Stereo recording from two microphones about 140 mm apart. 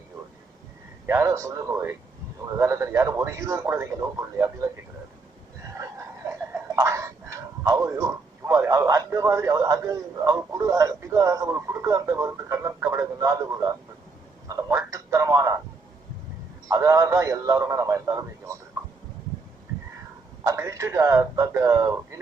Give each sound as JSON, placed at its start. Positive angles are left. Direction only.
{"t": 1.0, "sound": "speech", "side_deg": -20}
{"t": 5.7, "sound": "a sound", "side_deg": -20}
{"t": 9.8, "sound": "a man's voice", "side_deg": -25}
{"t": 16.6, "sound": "speech", "side_deg": -25}
{"t": 20.4, "sound": "speech", "side_deg": -20}